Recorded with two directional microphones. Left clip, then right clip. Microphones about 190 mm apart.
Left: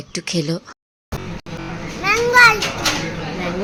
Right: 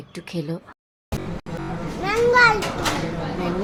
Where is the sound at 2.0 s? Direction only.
15° right (ahead or behind).